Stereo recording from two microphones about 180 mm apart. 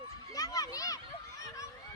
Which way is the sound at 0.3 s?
20° left (ahead or behind).